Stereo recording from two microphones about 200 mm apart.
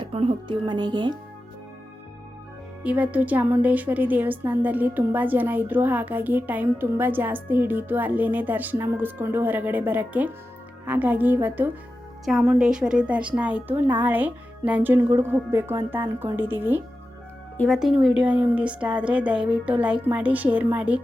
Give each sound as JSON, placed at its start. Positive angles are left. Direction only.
{"t": 0.0, "sound": "speech", "side_deg": -30}
{"t": 2.8, "sound": "a woman's voice", "side_deg": -5}